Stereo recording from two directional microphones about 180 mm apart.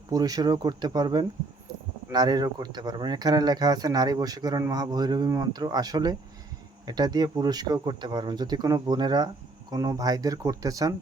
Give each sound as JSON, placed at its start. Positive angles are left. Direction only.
{"t": 0.1, "sound": "speech", "side_deg": -20}